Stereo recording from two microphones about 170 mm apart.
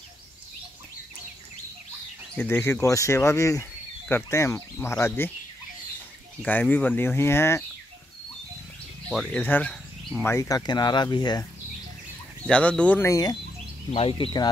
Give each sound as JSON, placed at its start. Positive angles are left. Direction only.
{"t": 2.3, "sound": "speech", "side_deg": 10}
{"t": 6.4, "sound": "speech", "side_deg": 10}
{"t": 9.1, "sound": "speech", "side_deg": 5}
{"t": 12.4, "sound": "speech", "side_deg": 5}
{"t": 13.9, "sound": "speech", "side_deg": 30}